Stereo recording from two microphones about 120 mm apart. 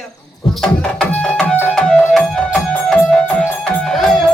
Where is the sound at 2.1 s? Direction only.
5° left (ahead or behind).